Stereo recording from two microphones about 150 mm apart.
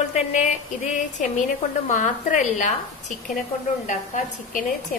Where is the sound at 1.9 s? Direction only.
60° left (ahead or behind).